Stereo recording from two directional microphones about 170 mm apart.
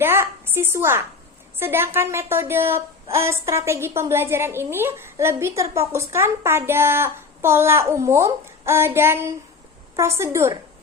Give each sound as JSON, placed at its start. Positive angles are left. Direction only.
{"t": 0.0, "sound": "speech", "side_deg": -15}